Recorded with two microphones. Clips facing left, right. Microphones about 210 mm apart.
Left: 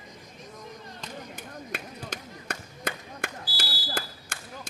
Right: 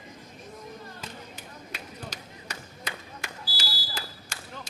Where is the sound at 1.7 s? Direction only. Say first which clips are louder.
Left 6 dB; 55° left (ahead or behind).